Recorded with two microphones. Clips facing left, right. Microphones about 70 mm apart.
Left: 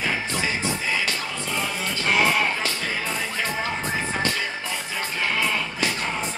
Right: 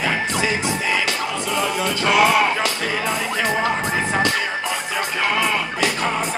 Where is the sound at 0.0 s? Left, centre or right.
Right.